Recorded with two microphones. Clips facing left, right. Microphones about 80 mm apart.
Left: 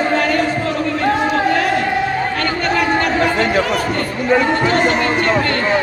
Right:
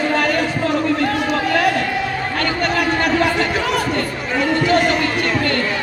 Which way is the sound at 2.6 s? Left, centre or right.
Left.